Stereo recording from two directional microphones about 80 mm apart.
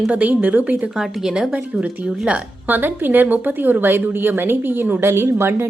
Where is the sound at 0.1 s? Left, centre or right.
Centre.